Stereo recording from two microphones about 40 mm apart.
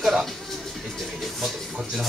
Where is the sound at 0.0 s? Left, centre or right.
Centre.